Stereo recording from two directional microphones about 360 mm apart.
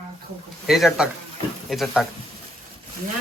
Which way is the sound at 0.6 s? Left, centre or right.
Centre.